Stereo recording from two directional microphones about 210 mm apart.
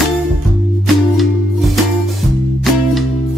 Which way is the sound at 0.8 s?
Centre (ahead or behind).